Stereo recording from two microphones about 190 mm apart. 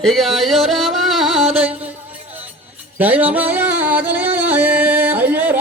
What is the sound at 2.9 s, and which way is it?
Music, 10° right (ahead or behind).